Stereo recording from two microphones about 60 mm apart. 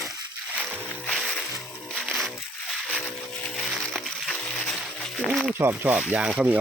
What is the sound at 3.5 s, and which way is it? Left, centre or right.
Music, centre.